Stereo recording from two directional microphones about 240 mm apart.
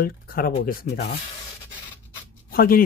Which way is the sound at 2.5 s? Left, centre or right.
Left.